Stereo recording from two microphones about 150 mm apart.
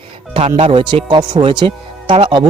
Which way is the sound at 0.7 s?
35° right (ahead or behind).